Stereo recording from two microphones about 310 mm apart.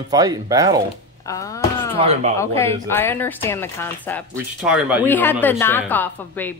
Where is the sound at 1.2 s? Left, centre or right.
Centre.